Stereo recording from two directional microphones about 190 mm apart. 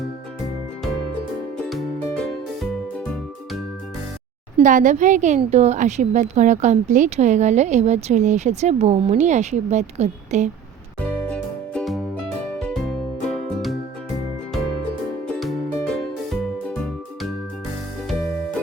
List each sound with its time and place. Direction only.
1.6 s music: 5° left (ahead or behind)
4.6 s a woman's voice: 40° right (ahead or behind)
11.3 s music: 5° left (ahead or behind)
15.4 s music: centre (ahead or behind)